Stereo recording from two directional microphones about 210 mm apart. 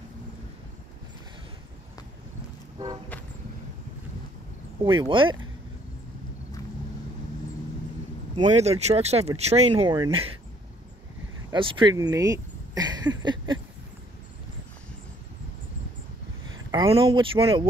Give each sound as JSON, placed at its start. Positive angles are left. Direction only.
{"t": 4.8, "sound": "speech", "side_deg": -25}
{"t": 8.4, "sound": "speech", "side_deg": -30}
{"t": 11.5, "sound": "speech", "side_deg": -25}
{"t": 16.7, "sound": "speech", "side_deg": -25}